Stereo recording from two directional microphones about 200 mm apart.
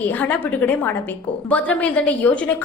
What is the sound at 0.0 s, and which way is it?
A woman's voice, 10° left (ahead or behind).